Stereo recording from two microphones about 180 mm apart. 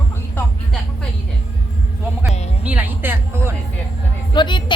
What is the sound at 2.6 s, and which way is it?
Music, 10° right (ahead or behind).